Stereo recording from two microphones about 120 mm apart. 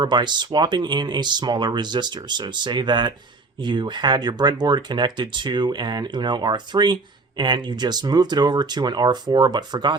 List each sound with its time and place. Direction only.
0.0 s speech: 40° right (ahead or behind)